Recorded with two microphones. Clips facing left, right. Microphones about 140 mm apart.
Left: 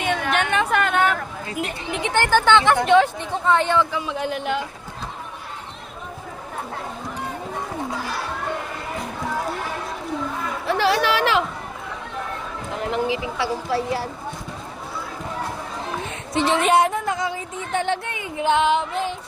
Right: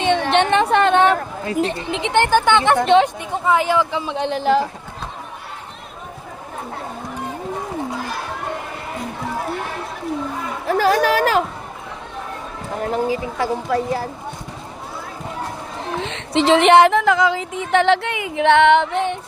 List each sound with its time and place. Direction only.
0.0 s a sound: 30° right (ahead or behind)
1.9 s speech: 20° right (ahead or behind)
3.2 s speech: 10° right (ahead or behind)
3.9 s speech: 25° right (ahead or behind)
10.7 s speech: 45° right (ahead or behind)
12.7 s speech: 40° right (ahead or behind)
16.0 s female singing: 90° right; by 19.1 s 70° right (ahead or behind)